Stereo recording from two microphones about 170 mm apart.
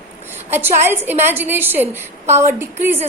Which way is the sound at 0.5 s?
10° right (ahead or behind).